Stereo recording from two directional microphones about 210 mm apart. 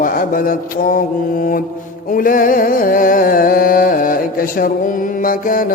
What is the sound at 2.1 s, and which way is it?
Music, 40° left (ahead or behind).